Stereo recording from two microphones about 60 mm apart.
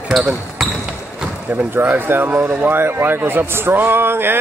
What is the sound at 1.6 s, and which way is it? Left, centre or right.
Speech, right.